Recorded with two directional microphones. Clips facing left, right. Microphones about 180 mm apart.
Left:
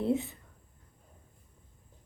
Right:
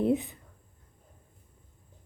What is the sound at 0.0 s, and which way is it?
Speech, 15° right (ahead or behind).